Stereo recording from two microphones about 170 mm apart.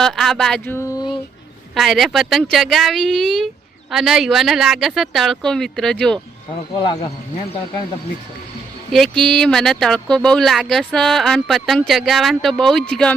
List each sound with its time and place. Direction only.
0.0 s speech: centre (ahead or behind); by 1.2 s 25° left (ahead or behind)
1.7 s speech: centre (ahead or behind)
6.7 s speech: 25° left (ahead or behind)
8.9 s speech: centre (ahead or behind)